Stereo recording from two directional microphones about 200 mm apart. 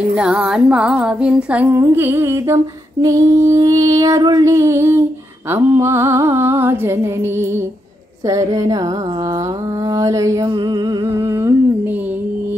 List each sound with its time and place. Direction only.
0.1 s female singing: 5° right (ahead or behind)
9.9 s female singing: 15° right (ahead or behind)